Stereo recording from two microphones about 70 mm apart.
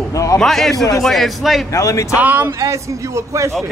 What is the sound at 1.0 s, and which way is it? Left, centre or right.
Speech, centre.